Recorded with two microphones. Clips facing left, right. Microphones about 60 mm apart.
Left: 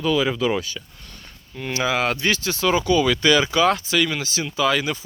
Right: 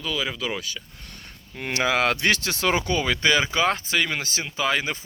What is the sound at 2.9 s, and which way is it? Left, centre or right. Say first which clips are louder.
Speech: left 5 dB; right.